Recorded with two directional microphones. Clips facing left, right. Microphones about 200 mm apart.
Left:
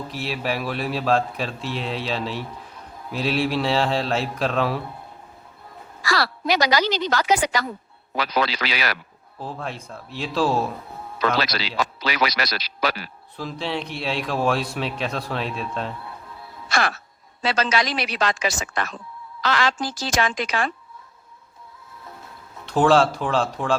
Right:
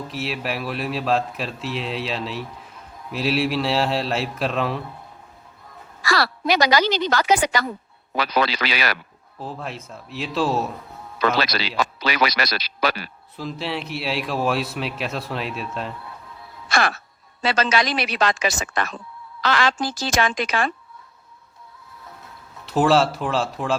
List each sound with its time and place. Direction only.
0.1 s a man's voice: centre (ahead or behind)
6.1 s a woman's voice: 60° right (ahead or behind)
9.4 s a man's voice: centre (ahead or behind)
12.0 s a woman's voice: 60° right (ahead or behind)
13.3 s a man's voice: centre (ahead or behind)
16.6 s a woman's voice: 60° right (ahead or behind)
22.6 s a man's voice: 5° right (ahead or behind)